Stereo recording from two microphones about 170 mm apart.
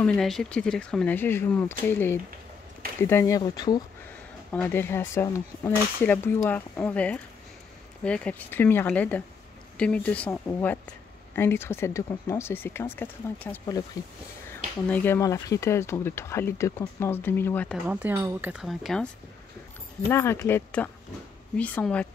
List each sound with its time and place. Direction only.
0.0 s a woman's voice: 5° left (ahead or behind); by 3.8 s 25° left (ahead or behind)
4.5 s a woman's voice: 10° left (ahead or behind)
17.8 s speech: 10° right (ahead or behind)
20.1 s a woman's voice: 15° left (ahead or behind)